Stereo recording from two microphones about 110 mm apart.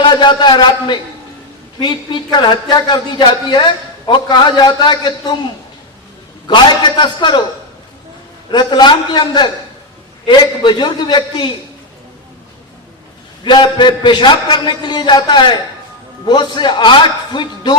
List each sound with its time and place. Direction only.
0.0 s a man's voice: 45° left (ahead or behind)
2.6 s a man's voice: 45° left (ahead or behind)
6.5 s a man's voice: 45° left (ahead or behind)
8.4 s a man's voice: 45° left (ahead or behind)
13.4 s a man's voice: 45° left (ahead or behind)